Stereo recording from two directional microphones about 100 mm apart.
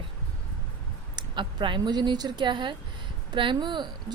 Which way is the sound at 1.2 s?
55° right (ahead or behind).